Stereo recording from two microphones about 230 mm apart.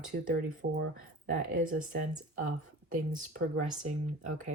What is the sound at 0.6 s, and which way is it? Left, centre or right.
Speech, right.